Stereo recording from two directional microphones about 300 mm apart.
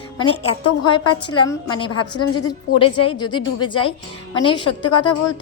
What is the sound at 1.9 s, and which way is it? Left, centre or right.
Speech, left.